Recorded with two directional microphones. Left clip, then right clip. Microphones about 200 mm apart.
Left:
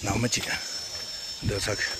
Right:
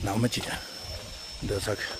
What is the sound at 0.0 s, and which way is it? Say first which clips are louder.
Speech: left 1 dB; 15° right (ahead or behind).